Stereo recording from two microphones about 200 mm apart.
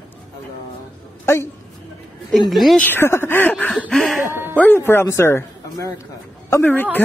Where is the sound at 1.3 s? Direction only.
15° left (ahead or behind).